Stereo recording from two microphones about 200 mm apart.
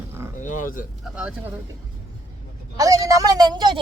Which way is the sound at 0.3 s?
40° left (ahead or behind).